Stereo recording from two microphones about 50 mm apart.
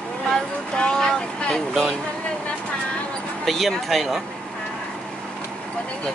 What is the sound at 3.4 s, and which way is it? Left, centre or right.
Speech, centre.